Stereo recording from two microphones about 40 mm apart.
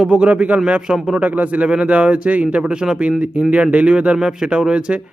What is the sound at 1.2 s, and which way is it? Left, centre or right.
Speech, right.